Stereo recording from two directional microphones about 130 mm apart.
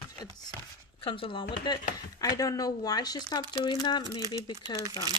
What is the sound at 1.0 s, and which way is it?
Speech, 40° left (ahead or behind).